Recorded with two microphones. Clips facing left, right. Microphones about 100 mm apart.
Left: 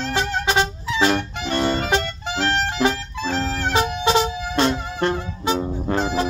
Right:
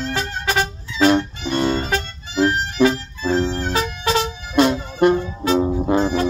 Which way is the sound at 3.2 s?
90° left.